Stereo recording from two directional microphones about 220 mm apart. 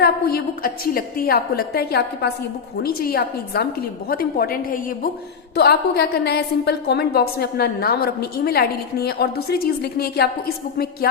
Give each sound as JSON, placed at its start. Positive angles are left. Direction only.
{"t": 0.0, "sound": "a woman's voice", "side_deg": 45}